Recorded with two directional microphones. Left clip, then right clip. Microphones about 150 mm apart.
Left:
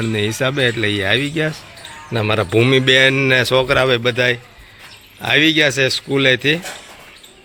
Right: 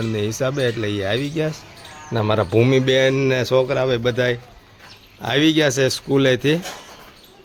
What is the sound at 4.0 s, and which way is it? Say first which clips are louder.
A man's voice: left 3 dB; 15° right (ahead or behind).